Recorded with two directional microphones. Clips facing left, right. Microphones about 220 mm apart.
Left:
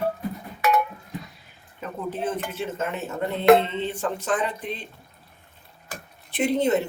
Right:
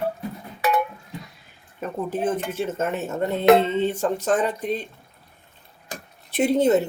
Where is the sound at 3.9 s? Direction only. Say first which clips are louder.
Right 4 dB; 40° right (ahead or behind).